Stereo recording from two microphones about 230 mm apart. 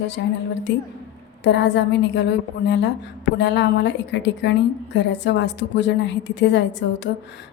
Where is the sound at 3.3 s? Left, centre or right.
Left.